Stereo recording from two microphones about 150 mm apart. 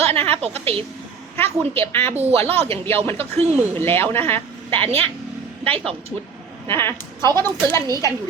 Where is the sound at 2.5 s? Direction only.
40° right (ahead or behind).